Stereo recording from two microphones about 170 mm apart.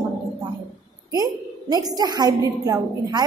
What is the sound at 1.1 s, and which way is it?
A woman's voice, 20° right (ahead or behind).